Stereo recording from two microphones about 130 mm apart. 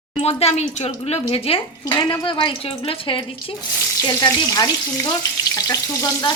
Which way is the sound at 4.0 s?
30° left (ahead or behind).